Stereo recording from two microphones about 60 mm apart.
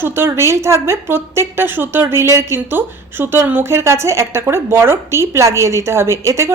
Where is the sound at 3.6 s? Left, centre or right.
Right.